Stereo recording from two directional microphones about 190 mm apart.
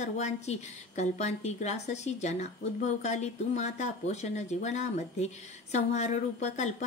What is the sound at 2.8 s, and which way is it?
Speech, 35° left (ahead or behind).